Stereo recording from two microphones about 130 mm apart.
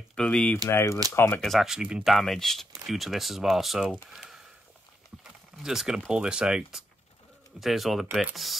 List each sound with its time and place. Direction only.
0.1 s speech: 5° left (ahead or behind)
0.7 s speech: 20° left (ahead or behind)
1.4 s speech: centre (ahead or behind)
5.6 s speech: 5° right (ahead or behind)